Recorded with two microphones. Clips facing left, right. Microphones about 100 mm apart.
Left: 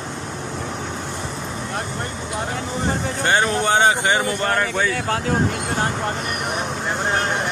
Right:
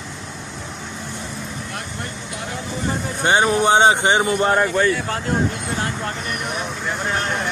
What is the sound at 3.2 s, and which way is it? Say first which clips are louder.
Speech: right 3 dB; 15° right (ahead or behind).